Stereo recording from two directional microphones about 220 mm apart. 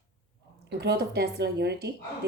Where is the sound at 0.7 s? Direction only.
50° right (ahead or behind).